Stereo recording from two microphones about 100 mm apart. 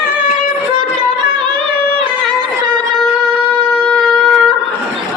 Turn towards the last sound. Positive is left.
turn(degrees=5)  # may be behind; listen again after turning